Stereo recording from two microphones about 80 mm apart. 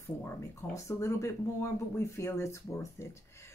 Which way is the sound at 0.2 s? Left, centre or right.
Left.